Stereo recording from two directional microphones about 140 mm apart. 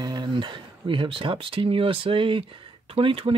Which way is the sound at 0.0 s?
30° right (ahead or behind).